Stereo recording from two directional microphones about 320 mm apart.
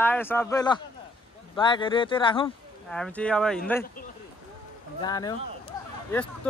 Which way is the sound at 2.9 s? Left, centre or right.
Centre.